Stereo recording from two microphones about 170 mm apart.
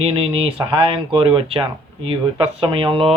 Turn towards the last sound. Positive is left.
turn(degrees=-30)  # may be behind; listen again after turning